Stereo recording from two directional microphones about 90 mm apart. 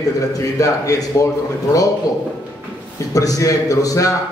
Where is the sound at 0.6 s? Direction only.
40° left (ahead or behind).